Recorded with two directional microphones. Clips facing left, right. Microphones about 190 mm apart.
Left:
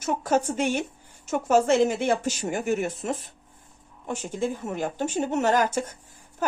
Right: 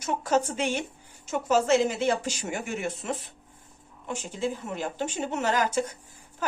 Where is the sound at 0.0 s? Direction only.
45° left (ahead or behind).